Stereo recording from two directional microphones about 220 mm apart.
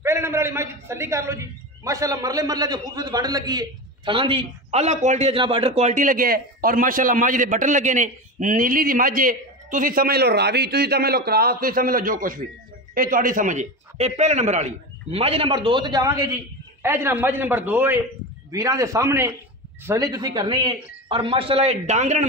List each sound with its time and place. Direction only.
0.0 s a man's voice: 10° right (ahead or behind); by 22.2 s 30° right (ahead or behind)